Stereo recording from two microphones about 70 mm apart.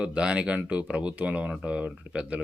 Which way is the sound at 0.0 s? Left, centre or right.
Centre.